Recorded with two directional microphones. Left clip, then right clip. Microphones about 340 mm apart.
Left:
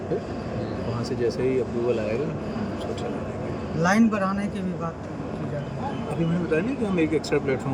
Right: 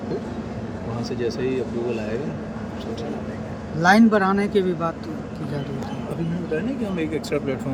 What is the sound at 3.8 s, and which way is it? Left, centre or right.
Speech, centre.